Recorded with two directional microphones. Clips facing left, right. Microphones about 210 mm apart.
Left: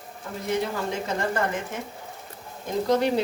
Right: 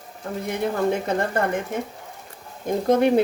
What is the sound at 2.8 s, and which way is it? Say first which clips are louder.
Speech: right 5 dB; 55° right (ahead or behind).